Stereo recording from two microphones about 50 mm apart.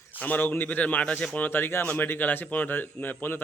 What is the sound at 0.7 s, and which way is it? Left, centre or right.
Speech, left.